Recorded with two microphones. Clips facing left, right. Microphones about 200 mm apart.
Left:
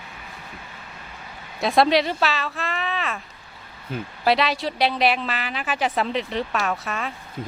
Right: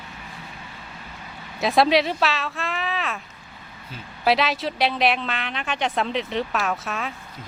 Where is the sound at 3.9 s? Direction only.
55° left (ahead or behind).